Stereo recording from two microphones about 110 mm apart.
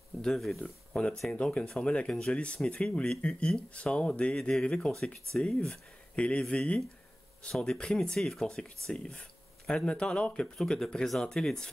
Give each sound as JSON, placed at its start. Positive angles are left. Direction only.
{"t": 0.2, "sound": "speech", "side_deg": 0}